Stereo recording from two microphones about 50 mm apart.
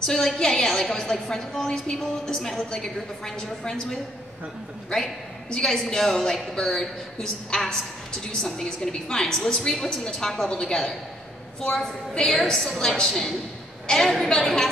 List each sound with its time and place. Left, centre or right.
0.0 s a woman's voice: centre
4.8 s a woman's voice: centre